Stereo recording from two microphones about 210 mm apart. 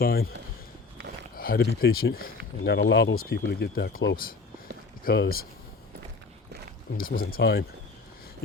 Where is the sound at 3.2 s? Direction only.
50° left (ahead or behind).